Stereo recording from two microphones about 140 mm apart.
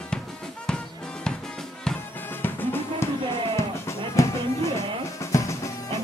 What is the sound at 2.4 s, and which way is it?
Drum, 15° left (ahead or behind).